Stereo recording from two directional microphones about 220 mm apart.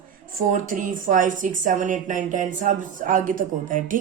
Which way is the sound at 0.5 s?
35° right (ahead or behind).